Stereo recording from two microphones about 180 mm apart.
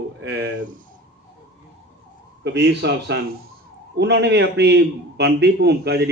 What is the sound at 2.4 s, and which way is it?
A man's voice, 75° right (ahead or behind).